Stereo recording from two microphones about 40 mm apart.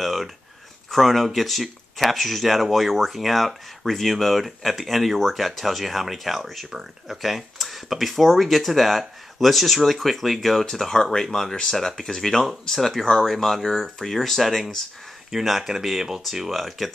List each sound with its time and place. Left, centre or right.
0.0 s a sound: centre
0.8 s speech: centre
15.3 s speech: centre